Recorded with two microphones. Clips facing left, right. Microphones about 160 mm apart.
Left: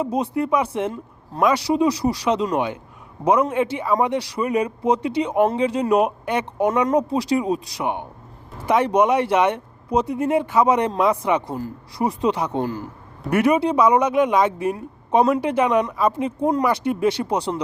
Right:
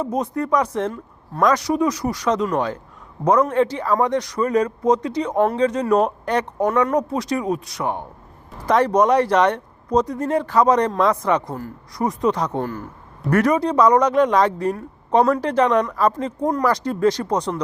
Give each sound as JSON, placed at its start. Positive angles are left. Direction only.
{"t": 0.3, "sound": "speech", "side_deg": 10}
{"t": 8.7, "sound": "speech", "side_deg": 5}